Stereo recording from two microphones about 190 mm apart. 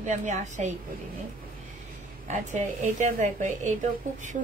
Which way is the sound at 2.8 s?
40° right (ahead or behind).